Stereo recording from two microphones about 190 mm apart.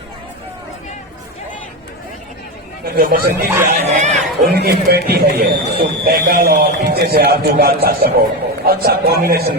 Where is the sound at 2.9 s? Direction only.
50° right (ahead or behind).